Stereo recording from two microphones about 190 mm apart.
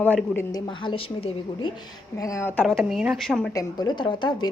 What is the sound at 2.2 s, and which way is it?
Speech, 15° left (ahead or behind).